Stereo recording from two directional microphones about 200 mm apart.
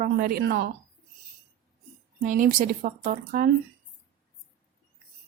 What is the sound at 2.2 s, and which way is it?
A woman's voice, 40° right (ahead or behind).